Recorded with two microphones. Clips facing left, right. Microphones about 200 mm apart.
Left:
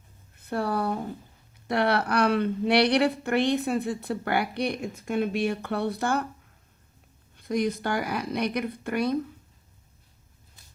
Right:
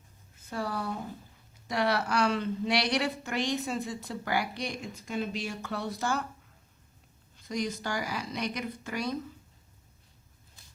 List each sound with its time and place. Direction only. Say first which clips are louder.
0.3 s speech: left 7 dB; 60° left (ahead or behind)
7.3 s speech: left 7 dB; 55° left (ahead or behind)